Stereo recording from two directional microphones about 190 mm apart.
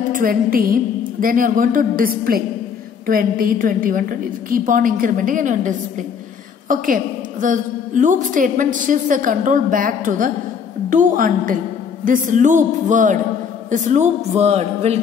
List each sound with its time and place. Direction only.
0.1 s a woman's voice: 50° right (ahead or behind)